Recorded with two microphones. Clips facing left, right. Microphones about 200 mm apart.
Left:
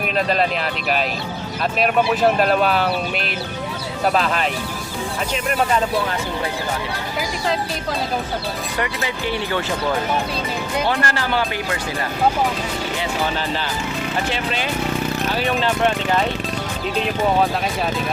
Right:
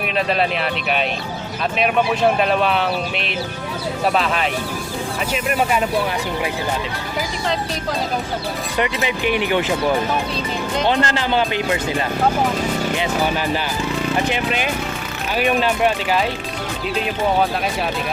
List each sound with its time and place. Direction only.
1.8 s speech: centre (ahead or behind)
8.8 s speech: 20° right (ahead or behind)
10.8 s speech: 20° right (ahead or behind)
14.3 s speech: 15° right (ahead or behind)